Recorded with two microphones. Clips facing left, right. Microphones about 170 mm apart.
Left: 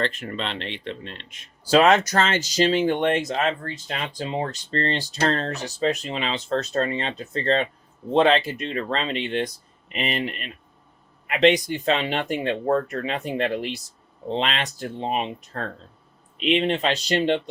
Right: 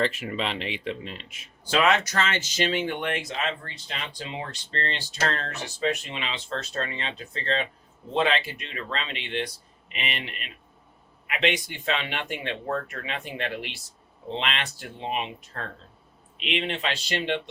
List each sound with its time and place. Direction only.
0.0 s speech: 5° right (ahead or behind)
1.7 s speech: 40° left (ahead or behind)